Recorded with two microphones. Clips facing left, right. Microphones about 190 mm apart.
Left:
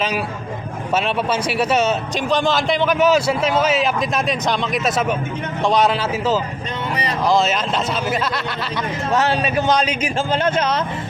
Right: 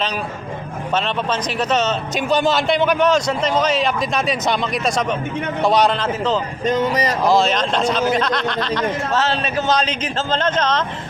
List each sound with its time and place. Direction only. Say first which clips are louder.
0.9 s speech: left 1 dB; 10° left (ahead or behind)
2.1 s a man's voice: right 3 dB; 5° right (ahead or behind)
6.7 s speech: right 7 dB; 40° right (ahead or behind)
7.3 s speech: even; centre (ahead or behind)